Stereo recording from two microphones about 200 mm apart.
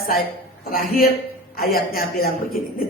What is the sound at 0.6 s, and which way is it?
Speech, 45° left (ahead or behind).